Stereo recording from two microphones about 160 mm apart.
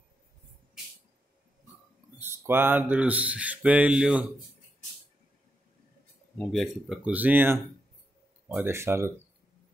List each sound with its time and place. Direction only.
2.1 s speech: 15° right (ahead or behind)
6.3 s speech: centre (ahead or behind); by 9.1 s 15° right (ahead or behind)